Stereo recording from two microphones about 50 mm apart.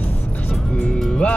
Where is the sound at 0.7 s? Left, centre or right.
Left.